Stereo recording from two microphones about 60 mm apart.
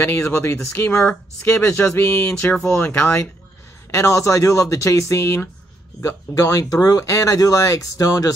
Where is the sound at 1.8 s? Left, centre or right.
Left.